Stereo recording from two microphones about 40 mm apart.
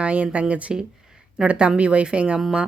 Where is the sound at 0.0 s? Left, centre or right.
Right.